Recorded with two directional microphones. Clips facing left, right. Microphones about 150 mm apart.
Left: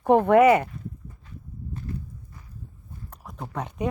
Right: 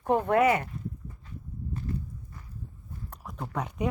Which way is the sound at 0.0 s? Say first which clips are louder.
Left 7 dB; 70° left (ahead or behind).